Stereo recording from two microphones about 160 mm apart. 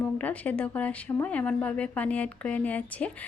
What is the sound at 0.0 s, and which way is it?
Speech, 10° left (ahead or behind).